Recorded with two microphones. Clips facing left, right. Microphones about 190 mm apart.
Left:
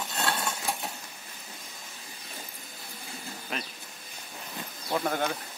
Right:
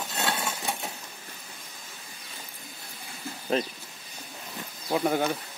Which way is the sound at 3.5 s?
30° right (ahead or behind).